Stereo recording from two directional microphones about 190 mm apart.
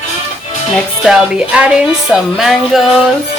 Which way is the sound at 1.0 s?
5° right (ahead or behind).